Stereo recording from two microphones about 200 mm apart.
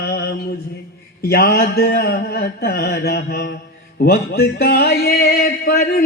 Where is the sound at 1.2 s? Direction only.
50° left (ahead or behind).